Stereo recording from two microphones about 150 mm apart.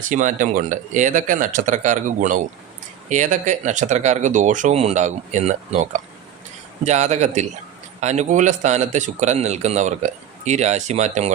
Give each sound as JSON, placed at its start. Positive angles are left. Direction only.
{"t": 0.1, "sound": "a man's voice", "side_deg": -60}